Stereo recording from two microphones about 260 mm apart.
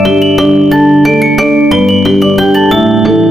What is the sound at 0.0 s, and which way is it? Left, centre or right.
Music, centre.